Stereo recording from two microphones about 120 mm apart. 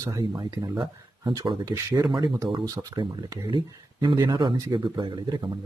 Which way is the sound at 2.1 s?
40° right (ahead or behind).